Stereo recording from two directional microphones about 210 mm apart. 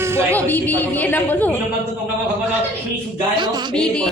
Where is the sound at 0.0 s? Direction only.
10° right (ahead or behind).